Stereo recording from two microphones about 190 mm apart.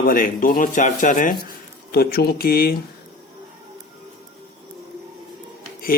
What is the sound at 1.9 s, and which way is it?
Speech, 55° left (ahead or behind).